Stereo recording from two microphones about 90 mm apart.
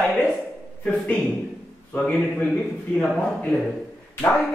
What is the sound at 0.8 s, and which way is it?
A man's voice, 10° left (ahead or behind).